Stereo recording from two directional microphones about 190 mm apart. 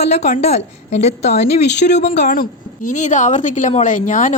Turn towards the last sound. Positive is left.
turn(degrees=40)  # may be behind; listen again after turning